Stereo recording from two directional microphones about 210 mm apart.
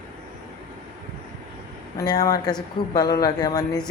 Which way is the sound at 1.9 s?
20° left (ahead or behind).